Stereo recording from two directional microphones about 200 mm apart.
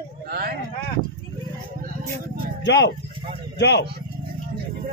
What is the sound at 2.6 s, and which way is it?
Speech, 60° left (ahead or behind).